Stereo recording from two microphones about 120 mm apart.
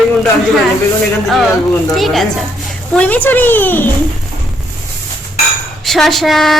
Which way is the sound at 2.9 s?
10° left (ahead or behind).